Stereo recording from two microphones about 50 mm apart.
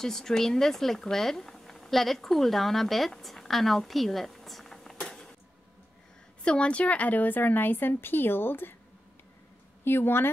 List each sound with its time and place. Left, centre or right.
0.0 s speech: centre
5.0 s a sound: centre
6.4 s a woman's voice: left
9.8 s speech: left